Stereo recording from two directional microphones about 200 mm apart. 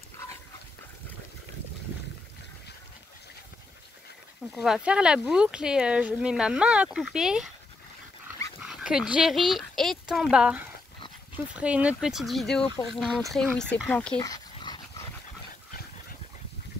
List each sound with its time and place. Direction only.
4.5 s speech: centre (ahead or behind)
8.5 s speech: 5° right (ahead or behind)
14.2 s dog: 20° left (ahead or behind)